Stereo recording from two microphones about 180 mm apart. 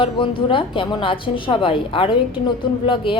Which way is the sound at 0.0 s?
30° left (ahead or behind).